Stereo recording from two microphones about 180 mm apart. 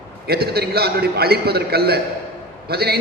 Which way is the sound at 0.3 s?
60° right (ahead or behind).